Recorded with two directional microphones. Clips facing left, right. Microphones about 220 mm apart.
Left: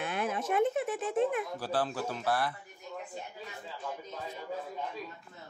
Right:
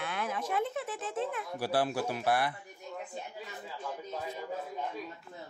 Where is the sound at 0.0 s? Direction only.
20° left (ahead or behind).